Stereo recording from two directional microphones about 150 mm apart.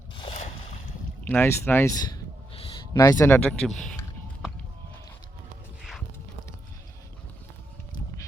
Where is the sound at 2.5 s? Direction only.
40° left (ahead or behind).